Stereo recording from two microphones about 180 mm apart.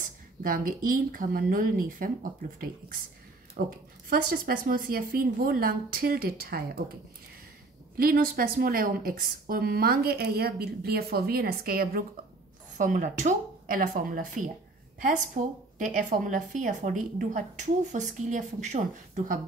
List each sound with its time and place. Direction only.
0.4 s a woman's voice: 50° right (ahead or behind)
3.6 s speech: 65° right (ahead or behind)
4.1 s a woman's voice: 50° right (ahead or behind)
8.0 s speech: 55° right (ahead or behind)
12.7 s a woman's voice: 45° right (ahead or behind)
15.4 s a woman's voice: 50° right (ahead or behind)